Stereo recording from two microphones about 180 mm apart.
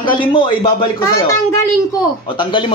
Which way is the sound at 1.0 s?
15° left (ahead or behind).